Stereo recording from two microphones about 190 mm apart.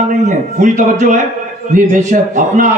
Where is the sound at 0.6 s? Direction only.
40° right (ahead or behind).